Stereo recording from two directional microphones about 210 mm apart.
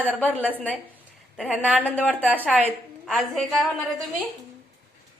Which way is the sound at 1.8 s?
10° left (ahead or behind).